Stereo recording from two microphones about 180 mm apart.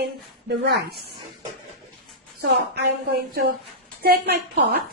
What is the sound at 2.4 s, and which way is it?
Speech, 65° right (ahead or behind).